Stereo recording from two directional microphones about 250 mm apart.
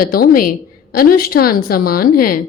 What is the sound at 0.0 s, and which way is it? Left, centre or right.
A woman's voice, left.